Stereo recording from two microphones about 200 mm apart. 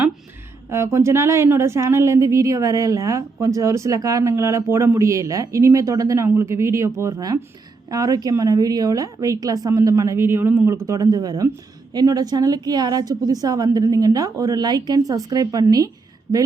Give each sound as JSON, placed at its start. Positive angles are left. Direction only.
{"t": 0.7, "sound": "speech", "side_deg": -15}